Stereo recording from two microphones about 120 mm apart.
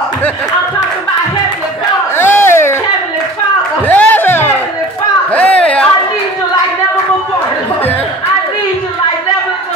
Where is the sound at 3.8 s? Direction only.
15° left (ahead or behind).